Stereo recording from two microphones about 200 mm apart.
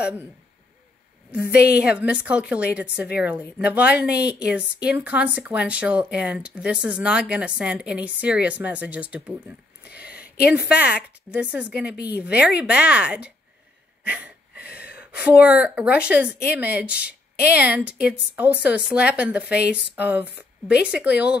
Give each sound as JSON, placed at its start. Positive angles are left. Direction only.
{"t": 0.0, "sound": "speech", "side_deg": -10}
{"t": 1.4, "sound": "a woman's voice", "side_deg": 55}
{"t": 1.8, "sound": "a woman's voice", "side_deg": -5}
{"t": 9.9, "sound": "a sound", "side_deg": -5}
{"t": 10.5, "sound": "a woman's voice", "side_deg": -5}
{"t": 14.0, "sound": "wheeze", "side_deg": -5}
{"t": 14.7, "sound": "a woman's voice", "side_deg": -5}